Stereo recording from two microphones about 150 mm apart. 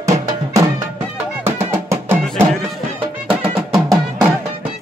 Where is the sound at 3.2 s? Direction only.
5° right (ahead or behind).